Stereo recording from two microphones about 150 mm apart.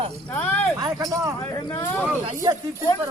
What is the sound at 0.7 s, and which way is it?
Speech, 25° right (ahead or behind).